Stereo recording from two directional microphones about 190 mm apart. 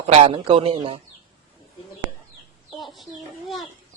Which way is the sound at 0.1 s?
30° right (ahead or behind).